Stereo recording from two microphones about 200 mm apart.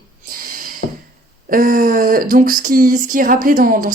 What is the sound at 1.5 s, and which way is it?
Speech, 45° right (ahead or behind).